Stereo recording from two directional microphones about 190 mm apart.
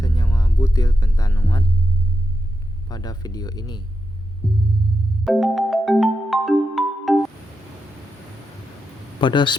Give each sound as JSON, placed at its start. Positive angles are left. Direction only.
{"t": 0.0, "sound": "music", "side_deg": 20}
{"t": 1.4, "sound": "speech", "side_deg": 15}
{"t": 2.9, "sound": "speech", "side_deg": 20}
{"t": 4.4, "sound": "music", "side_deg": 0}
{"t": 9.2, "sound": "speech", "side_deg": 25}